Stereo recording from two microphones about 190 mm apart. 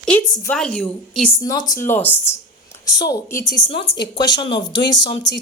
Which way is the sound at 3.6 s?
70° left (ahead or behind).